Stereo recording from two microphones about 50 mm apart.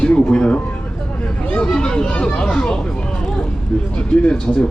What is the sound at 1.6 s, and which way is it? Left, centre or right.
Children playing, centre.